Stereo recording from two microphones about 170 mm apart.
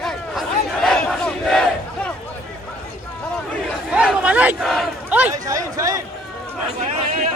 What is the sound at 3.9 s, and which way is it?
Crowd, 5° right (ahead or behind).